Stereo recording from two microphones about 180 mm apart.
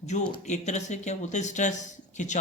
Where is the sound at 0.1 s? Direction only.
40° left (ahead or behind).